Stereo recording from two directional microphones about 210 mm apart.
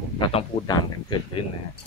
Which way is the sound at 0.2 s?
25° left (ahead or behind).